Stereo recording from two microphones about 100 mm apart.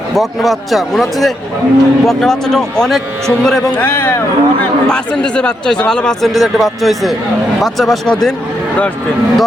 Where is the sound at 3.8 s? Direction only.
25° left (ahead or behind).